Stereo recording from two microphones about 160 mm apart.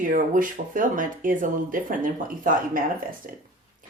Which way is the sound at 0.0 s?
60° right (ahead or behind).